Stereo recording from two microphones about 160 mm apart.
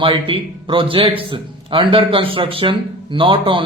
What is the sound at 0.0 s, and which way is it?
A man's voice, 35° right (ahead or behind).